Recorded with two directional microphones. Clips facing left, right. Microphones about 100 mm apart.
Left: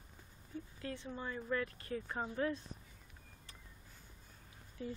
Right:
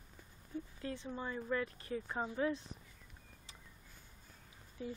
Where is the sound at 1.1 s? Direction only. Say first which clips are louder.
Right 1 dB; 15° right (ahead or behind).